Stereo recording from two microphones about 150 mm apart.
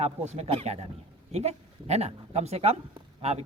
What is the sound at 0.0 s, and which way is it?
A man's voice, 45° right (ahead or behind).